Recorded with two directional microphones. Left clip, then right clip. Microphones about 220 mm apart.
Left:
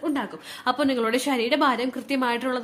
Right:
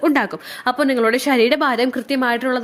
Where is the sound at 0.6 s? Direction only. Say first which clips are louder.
Right 6 dB; 20° right (ahead or behind).